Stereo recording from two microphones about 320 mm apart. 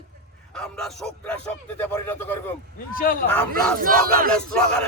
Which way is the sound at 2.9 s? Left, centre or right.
Left.